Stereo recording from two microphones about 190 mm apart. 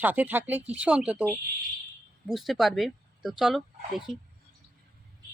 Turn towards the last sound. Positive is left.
turn(degrees=0)  # may be behind; listen again after turning